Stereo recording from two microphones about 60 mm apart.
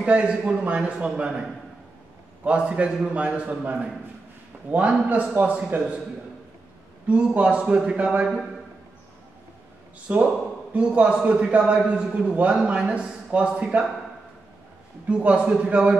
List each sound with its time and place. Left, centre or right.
0.0 s a man's voice: right
2.4 s a man's voice: right
7.1 s a man's voice: centre
10.1 s a man's voice: right
15.0 s a man's voice: centre